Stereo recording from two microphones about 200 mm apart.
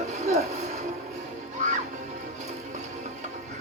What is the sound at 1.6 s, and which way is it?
Music, 40° right (ahead or behind).